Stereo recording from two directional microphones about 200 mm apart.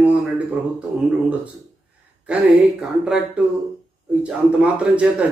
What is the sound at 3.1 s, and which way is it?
A man's voice, 5° right (ahead or behind).